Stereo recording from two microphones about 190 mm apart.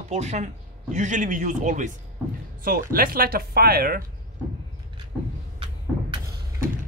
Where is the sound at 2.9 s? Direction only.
50° right (ahead or behind).